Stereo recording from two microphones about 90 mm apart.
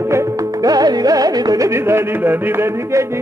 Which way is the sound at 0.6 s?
45° right (ahead or behind).